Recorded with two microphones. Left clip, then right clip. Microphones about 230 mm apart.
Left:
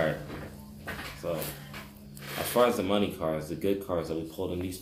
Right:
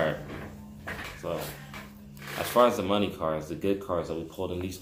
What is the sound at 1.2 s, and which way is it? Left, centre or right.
Speech, centre.